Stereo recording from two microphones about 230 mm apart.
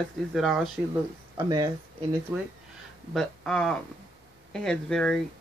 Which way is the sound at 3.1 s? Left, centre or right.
Centre.